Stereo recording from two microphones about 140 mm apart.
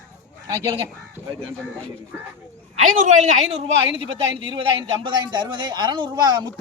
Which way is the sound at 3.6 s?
40° right (ahead or behind).